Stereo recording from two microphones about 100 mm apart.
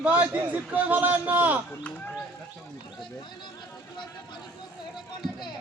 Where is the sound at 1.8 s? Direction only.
15° left (ahead or behind).